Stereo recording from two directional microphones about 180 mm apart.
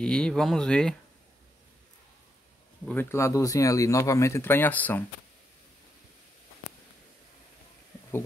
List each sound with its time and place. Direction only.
0.0 s speech: 5° left (ahead or behind)
2.9 s speech: 10° left (ahead or behind)